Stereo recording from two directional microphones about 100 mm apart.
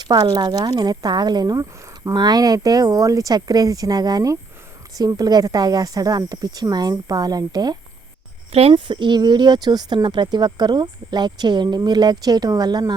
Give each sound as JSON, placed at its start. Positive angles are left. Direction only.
{"t": 0.0, "sound": "speech", "side_deg": -45}
{"t": 8.7, "sound": "speech", "side_deg": -55}